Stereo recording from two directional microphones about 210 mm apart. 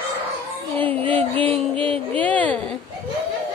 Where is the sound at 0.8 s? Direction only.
5° left (ahead or behind).